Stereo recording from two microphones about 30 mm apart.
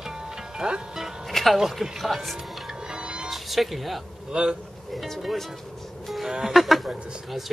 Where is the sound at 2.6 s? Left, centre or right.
Right.